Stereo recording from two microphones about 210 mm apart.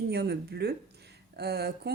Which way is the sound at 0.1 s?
50° right (ahead or behind).